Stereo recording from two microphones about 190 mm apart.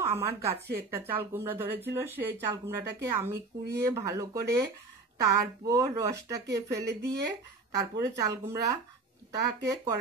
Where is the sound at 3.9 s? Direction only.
15° right (ahead or behind).